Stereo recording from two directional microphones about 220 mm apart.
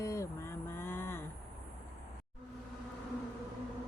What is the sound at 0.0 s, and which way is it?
Vehicle, 15° left (ahead or behind).